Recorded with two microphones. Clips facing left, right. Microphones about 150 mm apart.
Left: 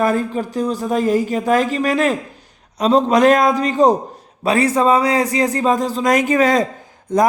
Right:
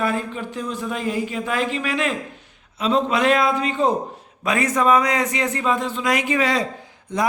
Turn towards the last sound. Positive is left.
turn(degrees=45)  # may be behind; listen again after turning